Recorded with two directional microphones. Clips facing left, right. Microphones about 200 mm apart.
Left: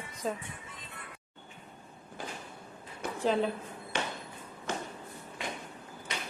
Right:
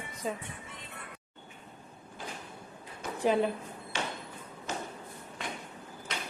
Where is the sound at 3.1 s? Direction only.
10° right (ahead or behind).